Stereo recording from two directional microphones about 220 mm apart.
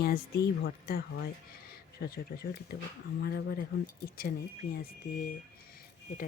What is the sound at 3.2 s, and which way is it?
Speech, 45° left (ahead or behind).